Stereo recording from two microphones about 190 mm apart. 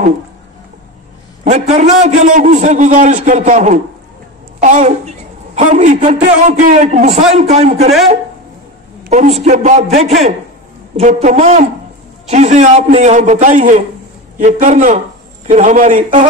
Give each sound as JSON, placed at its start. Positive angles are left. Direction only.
{"t": 1.4, "sound": "a woman's voice", "side_deg": -40}
{"t": 9.0, "sound": "a woman's voice", "side_deg": -40}